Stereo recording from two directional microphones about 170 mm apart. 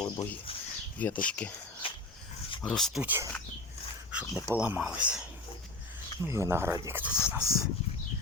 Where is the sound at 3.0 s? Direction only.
10° right (ahead or behind).